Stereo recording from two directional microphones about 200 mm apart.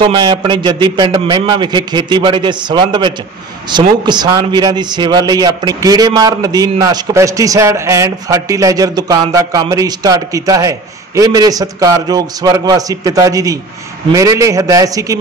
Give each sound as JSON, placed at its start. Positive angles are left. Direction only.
{"t": 0.0, "sound": "a man's voice", "side_deg": -20}